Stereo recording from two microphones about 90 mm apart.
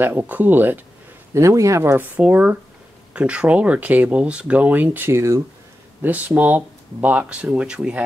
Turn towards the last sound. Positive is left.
turn(degrees=-10)  # may be behind; listen again after turning